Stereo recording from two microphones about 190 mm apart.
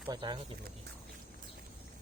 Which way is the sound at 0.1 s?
25° right (ahead or behind).